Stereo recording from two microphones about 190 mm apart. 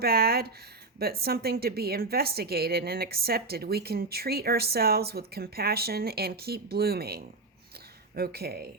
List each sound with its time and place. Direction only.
0.0 s a woman's voice: 55° right (ahead or behind)